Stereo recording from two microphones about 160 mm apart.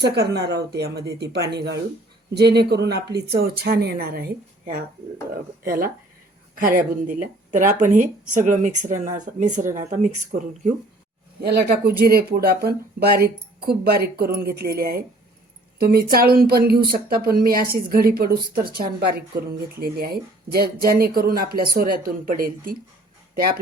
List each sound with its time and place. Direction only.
0.0 s speech: 90° right
3.4 s speech: 75° right (ahead or behind)
6.6 s speech: 60° right (ahead or behind)
11.4 s speech: 70° right (ahead or behind)